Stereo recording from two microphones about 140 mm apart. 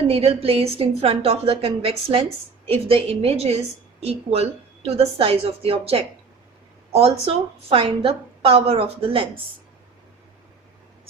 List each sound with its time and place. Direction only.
0.1 s a woman's voice: 45° right (ahead or behind)